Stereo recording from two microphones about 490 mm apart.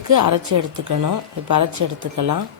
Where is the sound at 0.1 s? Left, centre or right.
Right.